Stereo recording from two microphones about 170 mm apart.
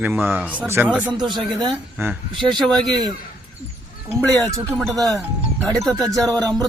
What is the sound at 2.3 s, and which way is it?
Speech, 25° right (ahead or behind).